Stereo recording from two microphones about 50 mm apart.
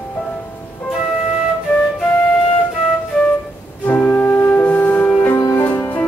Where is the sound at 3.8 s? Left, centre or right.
Left.